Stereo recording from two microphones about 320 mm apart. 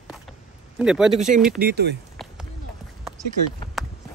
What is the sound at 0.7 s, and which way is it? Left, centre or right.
Speech, centre.